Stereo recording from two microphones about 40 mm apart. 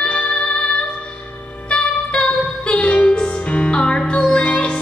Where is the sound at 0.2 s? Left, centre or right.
Left.